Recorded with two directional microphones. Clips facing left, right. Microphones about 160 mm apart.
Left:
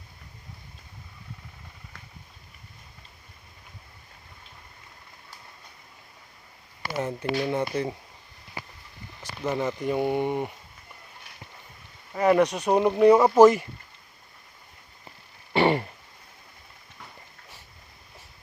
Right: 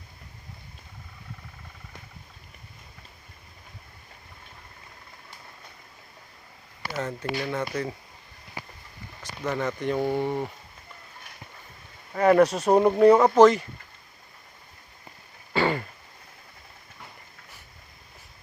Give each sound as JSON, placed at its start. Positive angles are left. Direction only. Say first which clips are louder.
{"t": 6.9, "sound": "speech", "louder": "left 3 dB", "side_deg": 15}
{"t": 9.4, "sound": "speech", "louder": "left 1 dB", "side_deg": 15}
{"t": 12.4, "sound": "speech", "louder": "right 3 dB", "side_deg": -5}
{"t": 15.5, "sound": "throat clearing", "louder": "left 3 dB", "side_deg": 25}